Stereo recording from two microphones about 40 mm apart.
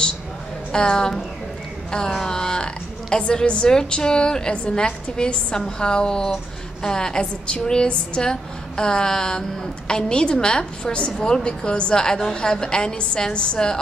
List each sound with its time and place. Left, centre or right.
0.7 s a woman's voice: centre